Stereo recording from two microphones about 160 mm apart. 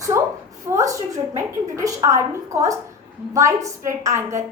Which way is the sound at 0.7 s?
20° right (ahead or behind).